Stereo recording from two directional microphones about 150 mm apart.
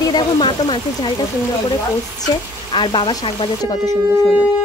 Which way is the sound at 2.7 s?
35° left (ahead or behind).